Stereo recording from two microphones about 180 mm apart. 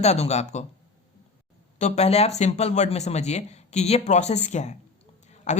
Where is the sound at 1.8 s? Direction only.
40° left (ahead or behind).